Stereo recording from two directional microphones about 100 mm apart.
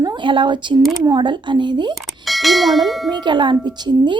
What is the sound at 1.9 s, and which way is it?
Speech, centre (ahead or behind).